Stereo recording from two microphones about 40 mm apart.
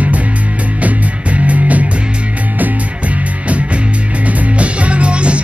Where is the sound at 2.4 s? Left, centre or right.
Right.